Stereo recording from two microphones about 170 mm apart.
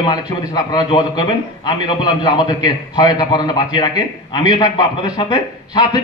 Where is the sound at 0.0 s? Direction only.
25° left (ahead or behind).